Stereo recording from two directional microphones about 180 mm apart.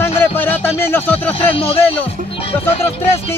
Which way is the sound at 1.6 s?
30° left (ahead or behind).